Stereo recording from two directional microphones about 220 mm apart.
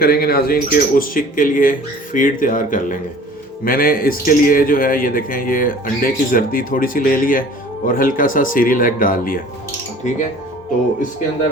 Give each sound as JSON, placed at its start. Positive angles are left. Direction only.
{"t": 0.0, "sound": "a man's voice", "side_deg": 45}